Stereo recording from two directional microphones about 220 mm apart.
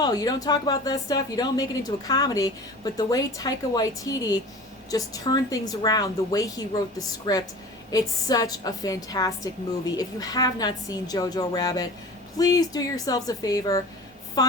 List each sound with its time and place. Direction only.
0.0 s a woman's voice: 15° left (ahead or behind)